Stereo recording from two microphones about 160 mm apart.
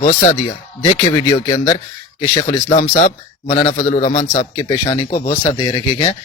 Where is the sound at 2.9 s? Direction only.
40° left (ahead or behind).